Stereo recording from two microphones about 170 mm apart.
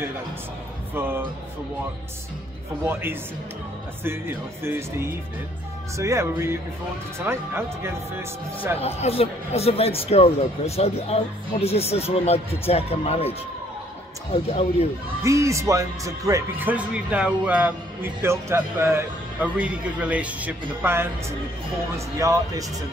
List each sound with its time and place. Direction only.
0.9 s speech: 15° right (ahead or behind)
2.8 s speech: 15° right (ahead or behind)
8.7 s speech: 35° left (ahead or behind)
15.2 s speech: 15° right (ahead or behind)